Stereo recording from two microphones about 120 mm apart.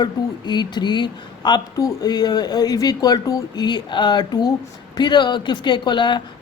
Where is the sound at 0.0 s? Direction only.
35° left (ahead or behind).